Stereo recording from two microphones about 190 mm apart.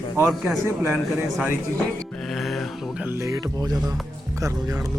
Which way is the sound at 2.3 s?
Centre (ahead or behind).